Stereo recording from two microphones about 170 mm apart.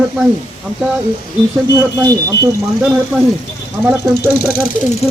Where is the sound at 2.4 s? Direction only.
15° right (ahead or behind).